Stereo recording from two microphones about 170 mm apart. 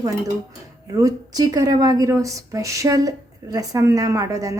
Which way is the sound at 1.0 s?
20° right (ahead or behind).